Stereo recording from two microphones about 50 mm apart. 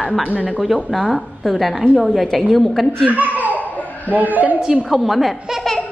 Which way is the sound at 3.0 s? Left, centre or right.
Right.